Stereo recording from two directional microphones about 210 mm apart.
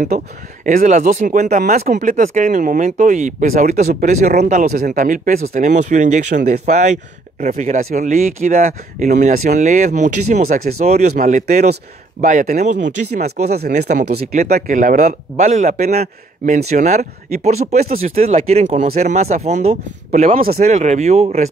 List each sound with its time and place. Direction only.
0.1 s speech: 35° right (ahead or behind)
12.8 s speech: 50° right (ahead or behind)
13.7 s speech: 35° right (ahead or behind)
20.7 s speech: 35° right (ahead or behind)